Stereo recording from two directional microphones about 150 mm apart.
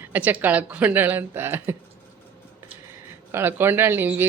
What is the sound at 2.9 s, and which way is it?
Speech, 15° right (ahead or behind).